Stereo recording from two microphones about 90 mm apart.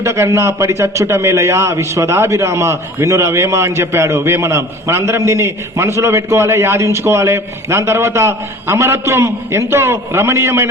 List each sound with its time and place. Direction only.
0.0 s a man's voice: 35° right (ahead or behind)